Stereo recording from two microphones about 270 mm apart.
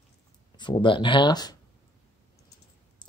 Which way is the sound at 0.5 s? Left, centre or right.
Centre.